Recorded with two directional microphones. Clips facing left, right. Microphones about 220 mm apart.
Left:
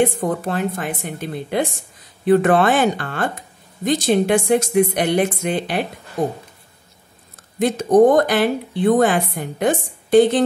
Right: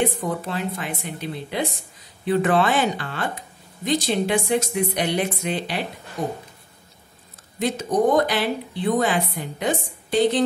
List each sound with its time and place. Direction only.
0.2 s speech: 50° left (ahead or behind)
7.5 s speech: 50° left (ahead or behind)